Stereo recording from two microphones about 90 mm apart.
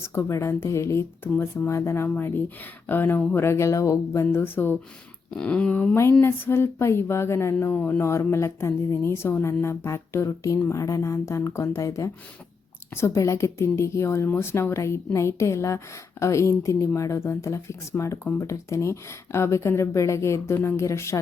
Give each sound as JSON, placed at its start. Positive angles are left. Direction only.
{"t": 0.1, "sound": "speech", "side_deg": 30}
{"t": 4.3, "sound": "speech", "side_deg": 25}
{"t": 5.3, "sound": "a sound", "side_deg": 10}
{"t": 6.2, "sound": "speech", "side_deg": 25}
{"t": 13.1, "sound": "speech", "side_deg": 35}